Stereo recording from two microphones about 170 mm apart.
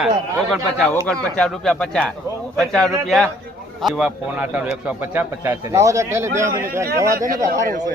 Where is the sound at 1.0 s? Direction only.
5° left (ahead or behind); by 7.3 s 20° right (ahead or behind).